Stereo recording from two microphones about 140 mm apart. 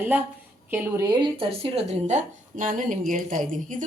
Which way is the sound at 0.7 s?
15° right (ahead or behind).